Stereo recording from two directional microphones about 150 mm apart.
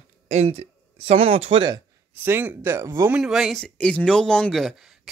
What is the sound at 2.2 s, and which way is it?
Speech, 10° right (ahead or behind).